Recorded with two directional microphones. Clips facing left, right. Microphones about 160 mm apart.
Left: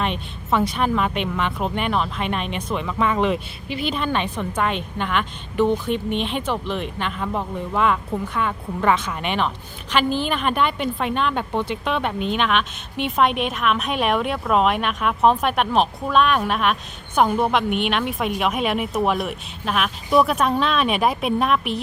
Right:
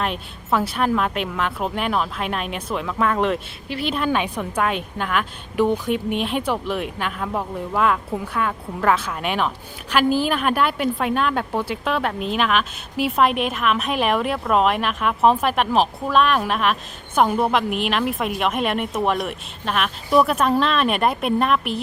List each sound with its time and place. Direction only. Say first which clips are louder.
0.0 s speech: left 1 dB; centre (ahead or behind)